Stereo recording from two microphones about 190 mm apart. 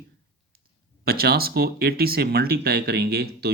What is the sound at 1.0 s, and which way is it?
Speech, 55° right (ahead or behind).